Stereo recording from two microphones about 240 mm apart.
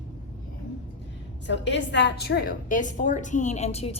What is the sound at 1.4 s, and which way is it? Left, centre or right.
A woman's voice, left.